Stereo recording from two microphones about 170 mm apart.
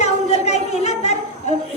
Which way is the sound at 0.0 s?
40° left (ahead or behind).